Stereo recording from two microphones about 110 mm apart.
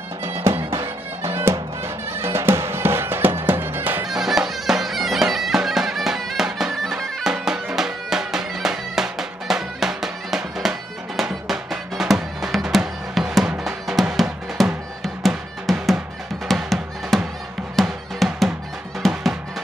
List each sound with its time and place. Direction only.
0.2 s music: 25° right (ahead or behind)
4.1 s bagpipes: 5° right (ahead or behind)
15.2 s music: centre (ahead or behind)